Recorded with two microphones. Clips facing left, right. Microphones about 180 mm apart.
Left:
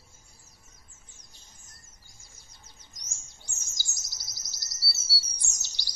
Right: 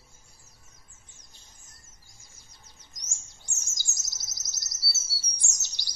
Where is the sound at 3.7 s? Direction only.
20° right (ahead or behind).